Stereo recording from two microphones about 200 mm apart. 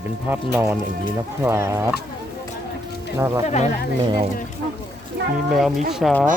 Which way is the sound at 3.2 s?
15° right (ahead or behind).